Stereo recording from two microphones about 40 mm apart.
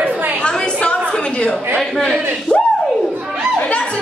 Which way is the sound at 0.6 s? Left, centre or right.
Left.